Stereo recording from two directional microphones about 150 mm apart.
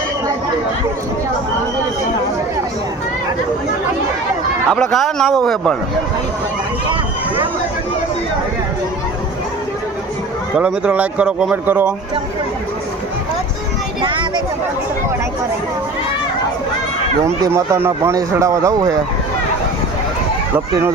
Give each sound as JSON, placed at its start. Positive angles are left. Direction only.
{"t": 4.7, "sound": "a man's voice", "side_deg": 0}
{"t": 10.6, "sound": "speech", "side_deg": -10}
{"t": 14.0, "sound": "a sound", "side_deg": -35}
{"t": 17.2, "sound": "speech", "side_deg": -20}